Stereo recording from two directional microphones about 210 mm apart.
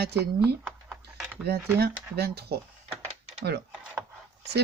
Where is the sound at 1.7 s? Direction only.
50° right (ahead or behind).